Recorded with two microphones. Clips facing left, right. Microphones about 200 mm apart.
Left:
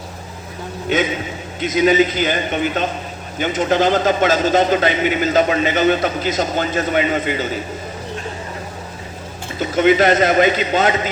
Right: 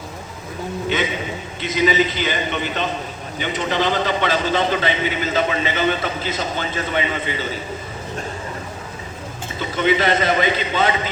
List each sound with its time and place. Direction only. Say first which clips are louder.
1.6 s a man's voice: left 4 dB; 50° left (ahead or behind)
9.6 s a man's voice: left 5 dB; 45° left (ahead or behind)